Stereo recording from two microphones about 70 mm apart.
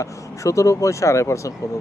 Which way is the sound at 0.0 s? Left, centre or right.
Left.